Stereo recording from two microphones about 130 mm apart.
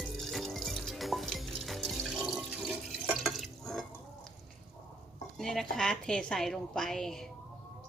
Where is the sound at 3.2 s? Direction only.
Centre (ahead or behind).